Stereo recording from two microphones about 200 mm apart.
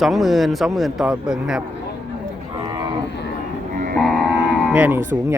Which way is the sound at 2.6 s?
20° right (ahead or behind).